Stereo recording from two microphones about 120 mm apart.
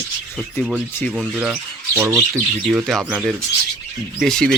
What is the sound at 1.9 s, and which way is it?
Speech, 25° right (ahead or behind).